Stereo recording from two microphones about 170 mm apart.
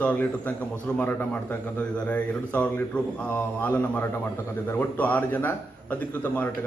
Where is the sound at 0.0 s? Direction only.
10° left (ahead or behind).